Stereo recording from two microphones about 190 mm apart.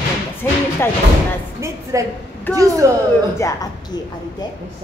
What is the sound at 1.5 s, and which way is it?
A woman's voice, 15° right (ahead or behind).